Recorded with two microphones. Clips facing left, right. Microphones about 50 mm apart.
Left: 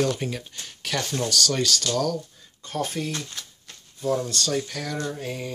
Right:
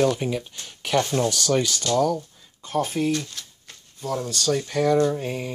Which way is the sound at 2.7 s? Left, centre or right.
Centre.